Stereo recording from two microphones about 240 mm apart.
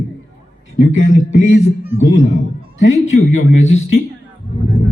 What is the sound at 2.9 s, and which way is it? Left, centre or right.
Speech, left.